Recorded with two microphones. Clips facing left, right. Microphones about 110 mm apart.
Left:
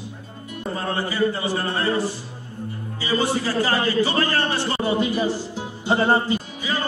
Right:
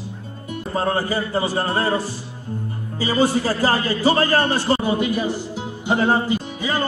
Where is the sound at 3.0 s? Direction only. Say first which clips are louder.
Right 4 dB; 40° right (ahead or behind).